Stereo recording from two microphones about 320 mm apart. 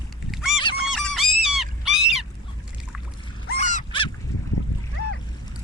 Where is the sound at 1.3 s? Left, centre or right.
Centre.